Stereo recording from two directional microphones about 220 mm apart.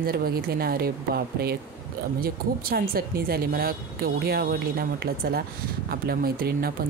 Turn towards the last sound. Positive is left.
turn(degrees=-45)  # may be behind; listen again after turning